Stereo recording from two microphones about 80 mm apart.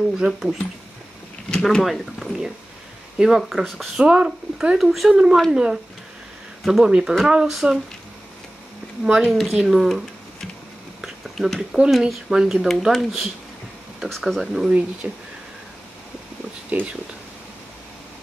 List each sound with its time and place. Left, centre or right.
0.2 s speech: centre
4.0 s speech: centre
4.7 s speech: centre
9.2 s speech: centre
15.0 s speech: centre
16.7 s speech: right